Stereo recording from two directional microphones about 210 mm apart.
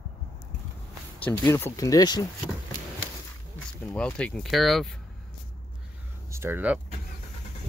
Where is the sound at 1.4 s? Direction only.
15° left (ahead or behind).